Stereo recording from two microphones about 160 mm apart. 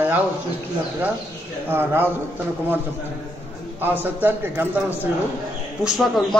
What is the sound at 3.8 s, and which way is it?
A man's voice, 10° right (ahead or behind).